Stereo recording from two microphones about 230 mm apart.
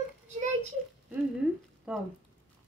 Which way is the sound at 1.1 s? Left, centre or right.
Centre.